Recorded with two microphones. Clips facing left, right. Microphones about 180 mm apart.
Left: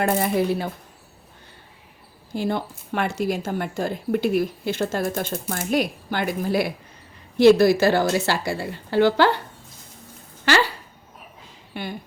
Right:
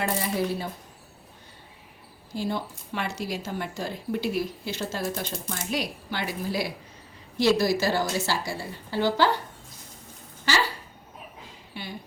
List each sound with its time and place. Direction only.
0.0 s a woman's voice: 60° left (ahead or behind)
2.3 s a woman's voice: 60° left (ahead or behind)
11.7 s speech: 55° left (ahead or behind)